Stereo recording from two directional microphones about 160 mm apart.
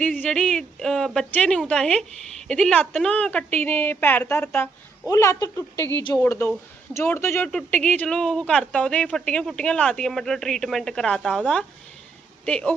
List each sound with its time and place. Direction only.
0.0 s a woman's voice: 10° left (ahead or behind)